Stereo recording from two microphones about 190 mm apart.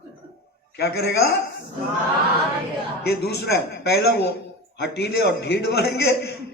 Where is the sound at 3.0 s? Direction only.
55° left (ahead or behind).